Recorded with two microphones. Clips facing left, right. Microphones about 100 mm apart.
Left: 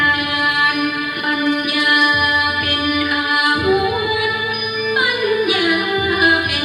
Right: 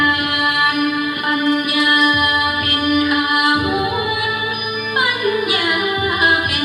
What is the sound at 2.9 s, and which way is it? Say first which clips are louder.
Music: right 5 dB; 25° right (ahead or behind).